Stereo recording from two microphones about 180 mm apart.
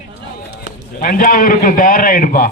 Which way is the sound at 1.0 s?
50° left (ahead or behind).